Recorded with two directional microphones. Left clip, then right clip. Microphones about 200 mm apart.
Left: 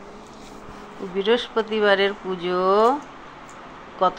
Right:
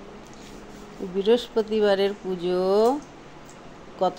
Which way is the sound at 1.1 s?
20° right (ahead or behind).